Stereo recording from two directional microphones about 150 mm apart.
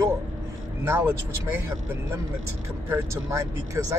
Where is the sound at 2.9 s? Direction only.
20° right (ahead or behind).